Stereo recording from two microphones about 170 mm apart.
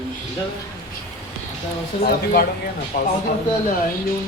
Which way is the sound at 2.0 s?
65° left (ahead or behind).